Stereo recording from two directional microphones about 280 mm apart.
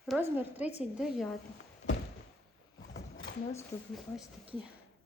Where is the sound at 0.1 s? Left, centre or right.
Centre.